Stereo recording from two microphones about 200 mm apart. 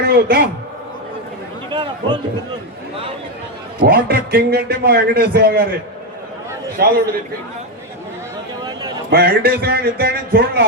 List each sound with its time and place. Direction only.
0.1 s a man's voice: 50° right (ahead or behind)
1.7 s a man's voice: 25° right (ahead or behind)
3.8 s a man's voice: 50° right (ahead or behind)
6.8 s a man's voice: 50° right (ahead or behind)
9.0 s a man's voice: 50° right (ahead or behind)